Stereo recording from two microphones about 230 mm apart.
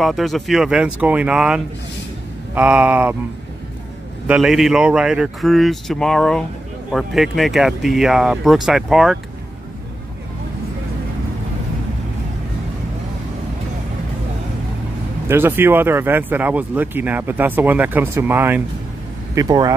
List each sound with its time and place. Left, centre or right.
0.0 s speech: centre
4.3 s speech: centre
15.2 s speech: centre